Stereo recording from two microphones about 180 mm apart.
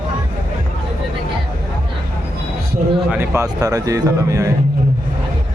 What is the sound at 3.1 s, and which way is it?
Speech, 15° right (ahead or behind).